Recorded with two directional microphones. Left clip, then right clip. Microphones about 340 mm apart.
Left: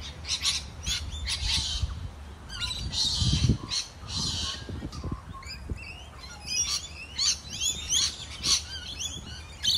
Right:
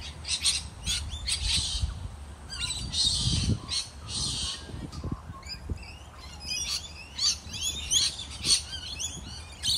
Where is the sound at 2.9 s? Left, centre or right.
Centre.